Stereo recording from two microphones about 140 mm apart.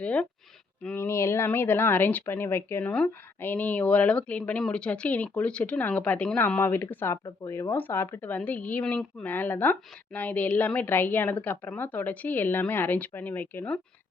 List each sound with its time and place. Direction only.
0.0 s a woman's voice: 10° left (ahead or behind)